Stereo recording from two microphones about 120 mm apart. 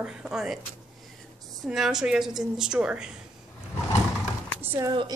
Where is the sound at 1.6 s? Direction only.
5° right (ahead or behind).